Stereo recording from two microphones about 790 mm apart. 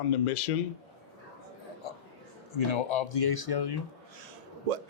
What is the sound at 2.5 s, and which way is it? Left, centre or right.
Speech, left.